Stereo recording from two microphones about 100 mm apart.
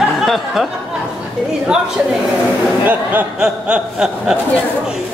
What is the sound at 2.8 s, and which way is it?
Speech, 20° right (ahead or behind).